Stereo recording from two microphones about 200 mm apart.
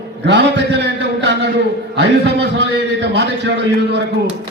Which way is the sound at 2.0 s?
60° right (ahead or behind).